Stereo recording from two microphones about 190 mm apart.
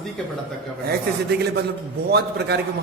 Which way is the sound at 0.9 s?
60° right (ahead or behind).